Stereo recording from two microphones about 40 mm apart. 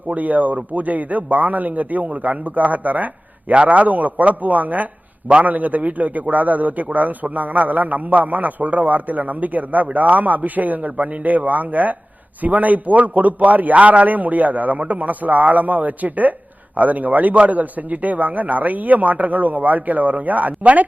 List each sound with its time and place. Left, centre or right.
0.1 s a man's voice: right